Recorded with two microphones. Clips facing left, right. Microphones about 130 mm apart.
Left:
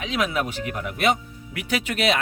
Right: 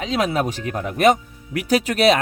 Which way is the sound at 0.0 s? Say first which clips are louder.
Right 4 dB; 35° right (ahead or behind).